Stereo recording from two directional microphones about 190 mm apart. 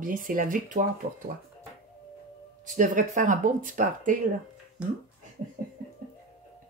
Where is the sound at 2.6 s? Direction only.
45° right (ahead or behind).